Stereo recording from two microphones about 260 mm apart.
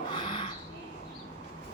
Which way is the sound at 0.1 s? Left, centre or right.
Centre.